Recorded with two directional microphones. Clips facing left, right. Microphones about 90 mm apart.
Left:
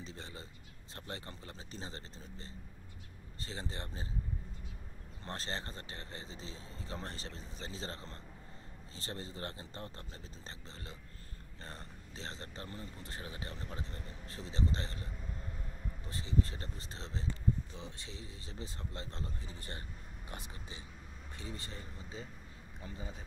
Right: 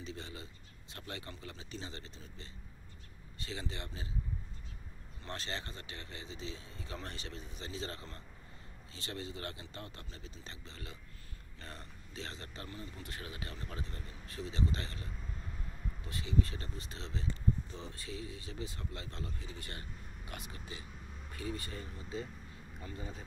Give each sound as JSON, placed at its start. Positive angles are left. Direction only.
{"t": 0.0, "sound": "speech", "side_deg": 35}
{"t": 5.2, "sound": "speech", "side_deg": 35}
{"t": 16.1, "sound": "speech", "side_deg": 30}
{"t": 17.7, "sound": "speech", "side_deg": 20}
{"t": 22.8, "sound": "speech", "side_deg": 10}